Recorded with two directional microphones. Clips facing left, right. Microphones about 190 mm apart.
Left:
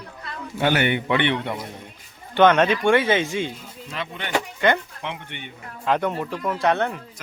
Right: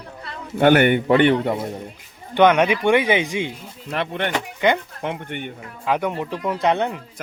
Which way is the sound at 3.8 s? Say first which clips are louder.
Right 8 dB; 60° right (ahead or behind).